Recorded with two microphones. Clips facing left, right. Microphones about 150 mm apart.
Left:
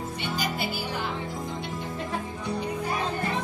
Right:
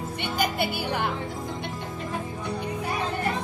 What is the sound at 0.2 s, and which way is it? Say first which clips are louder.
Music: right 4 dB; 60° right (ahead or behind).